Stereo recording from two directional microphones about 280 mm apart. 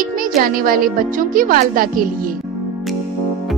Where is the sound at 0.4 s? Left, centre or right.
Right.